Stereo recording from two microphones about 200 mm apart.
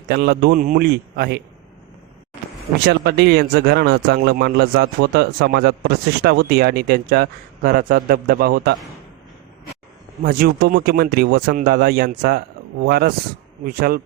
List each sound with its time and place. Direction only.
0.1 s a man's voice: 50° right (ahead or behind)
2.7 s a man's voice: 55° right (ahead or behind)
10.2 s a man's voice: 45° right (ahead or behind)